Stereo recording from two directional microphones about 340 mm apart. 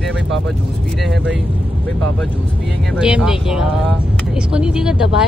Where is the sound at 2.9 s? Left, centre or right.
Centre.